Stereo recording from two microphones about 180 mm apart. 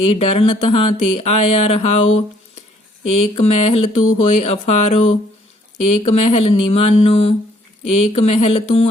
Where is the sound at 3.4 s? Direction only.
35° left (ahead or behind).